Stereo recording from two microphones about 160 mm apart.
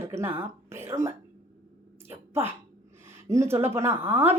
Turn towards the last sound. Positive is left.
turn(degrees=-15)  # may be behind; listen again after turning